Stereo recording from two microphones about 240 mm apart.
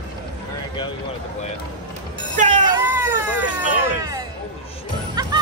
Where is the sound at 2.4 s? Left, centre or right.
Right.